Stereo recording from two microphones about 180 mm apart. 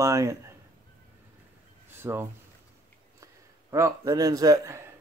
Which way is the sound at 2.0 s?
15° right (ahead or behind).